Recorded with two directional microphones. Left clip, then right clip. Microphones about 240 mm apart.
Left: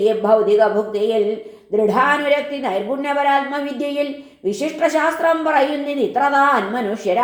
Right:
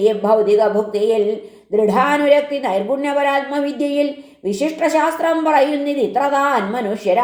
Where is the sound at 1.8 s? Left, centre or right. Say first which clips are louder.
Even; right.